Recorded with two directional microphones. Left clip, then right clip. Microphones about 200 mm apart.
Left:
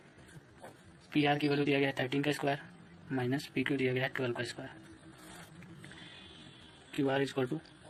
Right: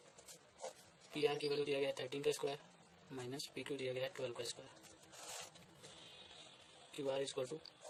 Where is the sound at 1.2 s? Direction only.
Centre (ahead or behind).